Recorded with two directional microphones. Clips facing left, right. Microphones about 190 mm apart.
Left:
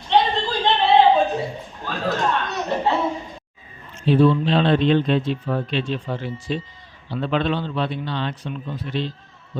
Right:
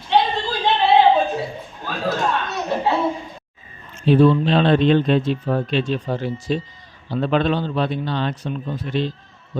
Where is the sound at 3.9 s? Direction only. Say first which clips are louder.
Right 2 dB; 50° right (ahead or behind).